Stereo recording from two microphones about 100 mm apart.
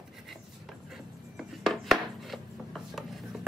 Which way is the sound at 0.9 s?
5° right (ahead or behind).